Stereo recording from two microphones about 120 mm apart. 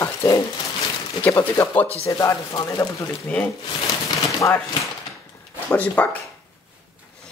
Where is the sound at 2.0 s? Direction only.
25° left (ahead or behind).